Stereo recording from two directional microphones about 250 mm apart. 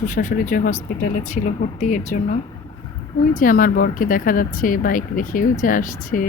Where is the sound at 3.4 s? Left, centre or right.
Left.